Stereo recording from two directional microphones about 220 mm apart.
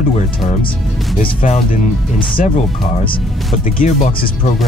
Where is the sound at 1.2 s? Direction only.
30° left (ahead or behind).